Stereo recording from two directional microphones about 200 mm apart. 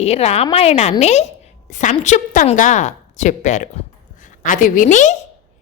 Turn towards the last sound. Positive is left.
turn(degrees=40)  # may be behind; listen again after turning